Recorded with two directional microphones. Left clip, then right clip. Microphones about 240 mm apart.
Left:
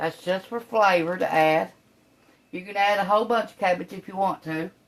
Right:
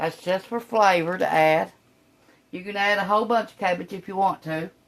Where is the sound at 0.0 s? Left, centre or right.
Right.